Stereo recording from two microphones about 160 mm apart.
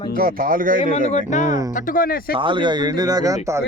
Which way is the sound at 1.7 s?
60° left (ahead or behind).